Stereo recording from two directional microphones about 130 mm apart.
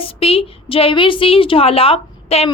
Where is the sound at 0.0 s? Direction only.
50° left (ahead or behind).